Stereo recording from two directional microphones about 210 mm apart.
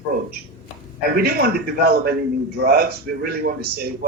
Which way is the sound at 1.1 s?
45° right (ahead or behind).